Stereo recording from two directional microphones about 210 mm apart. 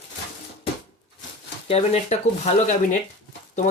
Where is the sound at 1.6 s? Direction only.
30° left (ahead or behind).